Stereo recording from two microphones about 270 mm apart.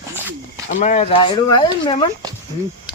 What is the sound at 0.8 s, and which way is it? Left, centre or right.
Speech, left.